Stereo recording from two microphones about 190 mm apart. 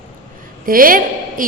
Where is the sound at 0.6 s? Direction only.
50° right (ahead or behind).